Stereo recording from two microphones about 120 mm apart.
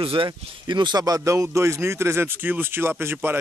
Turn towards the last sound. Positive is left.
turn(degrees=-15)  # may be behind; listen again after turning